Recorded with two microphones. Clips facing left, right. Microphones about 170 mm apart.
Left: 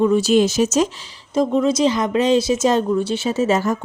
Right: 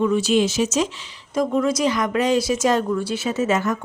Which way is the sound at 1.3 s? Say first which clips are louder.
Left 3 dB; 25° left (ahead or behind).